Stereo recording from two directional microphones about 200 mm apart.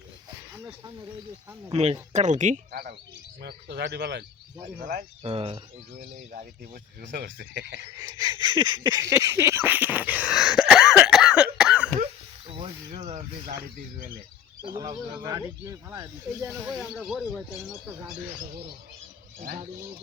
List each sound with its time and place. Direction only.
1.7 s speech: 30° right (ahead or behind)
3.4 s speech: 55° right (ahead or behind)
4.6 s speech: 45° right (ahead or behind)
5.2 s speech: 30° right (ahead or behind)
7.1 s speech: 55° right (ahead or behind)
7.9 s a sound: 20° right (ahead or behind)
12.5 s speech: 30° right (ahead or behind)
14.7 s speech: 20° right (ahead or behind)
16.5 s speech: centre (ahead or behind)
19.4 s speech: 45° right (ahead or behind)